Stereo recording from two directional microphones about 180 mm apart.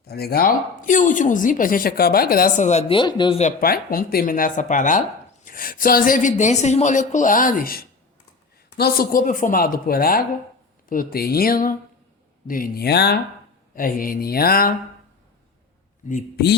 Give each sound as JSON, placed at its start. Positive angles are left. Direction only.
{"t": 0.0, "sound": "a woman's voice", "side_deg": 60}
{"t": 3.0, "sound": "speech", "side_deg": 25}
{"t": 3.4, "sound": "a woman's voice", "side_deg": 55}
{"t": 13.7, "sound": "a woman's voice", "side_deg": 50}